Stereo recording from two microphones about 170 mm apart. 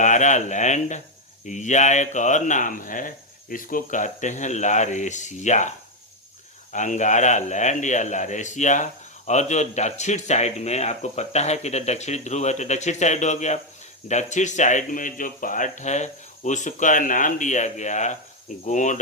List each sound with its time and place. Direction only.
0.0 s a man's voice: 45° left (ahead or behind)